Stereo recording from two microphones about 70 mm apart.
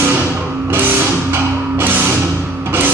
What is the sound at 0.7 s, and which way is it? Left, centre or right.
Music, right.